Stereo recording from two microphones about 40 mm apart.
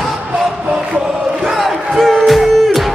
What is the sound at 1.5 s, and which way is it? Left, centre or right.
Music, centre.